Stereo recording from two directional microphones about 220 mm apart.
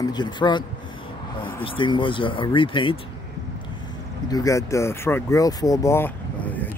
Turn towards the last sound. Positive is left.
turn(degrees=10)  # may be behind; listen again after turning